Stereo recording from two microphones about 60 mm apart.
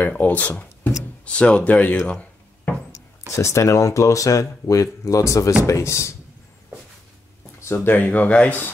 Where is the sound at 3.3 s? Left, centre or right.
Left.